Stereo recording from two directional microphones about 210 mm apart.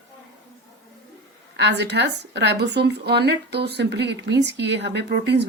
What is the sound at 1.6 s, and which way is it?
Speech, 55° right (ahead or behind).